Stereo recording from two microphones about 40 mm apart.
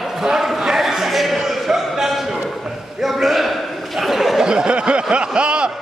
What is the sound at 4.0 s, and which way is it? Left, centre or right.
Chatter, centre.